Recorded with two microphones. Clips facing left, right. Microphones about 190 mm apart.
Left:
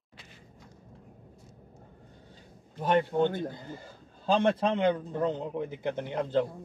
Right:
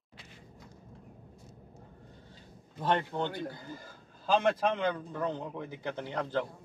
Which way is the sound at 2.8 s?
15° left (ahead or behind).